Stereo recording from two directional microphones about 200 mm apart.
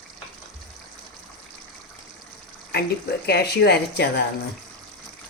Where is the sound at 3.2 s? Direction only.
55° left (ahead or behind).